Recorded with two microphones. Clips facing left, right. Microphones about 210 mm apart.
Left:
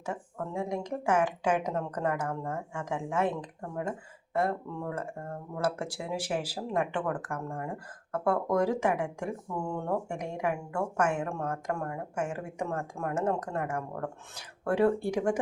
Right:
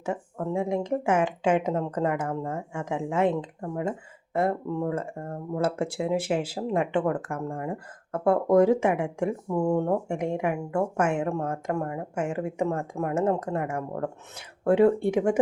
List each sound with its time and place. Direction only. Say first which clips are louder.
0.0 s speech: right 6 dB; 25° right (ahead or behind)
4.4 s speech: right 5 dB; 25° right (ahead or behind)